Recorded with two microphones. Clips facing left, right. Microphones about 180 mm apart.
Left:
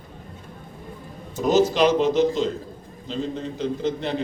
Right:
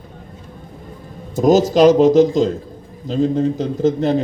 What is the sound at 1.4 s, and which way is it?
A man's voice, 40° right (ahead or behind).